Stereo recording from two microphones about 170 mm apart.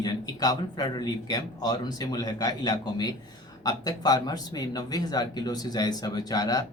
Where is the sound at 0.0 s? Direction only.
25° left (ahead or behind).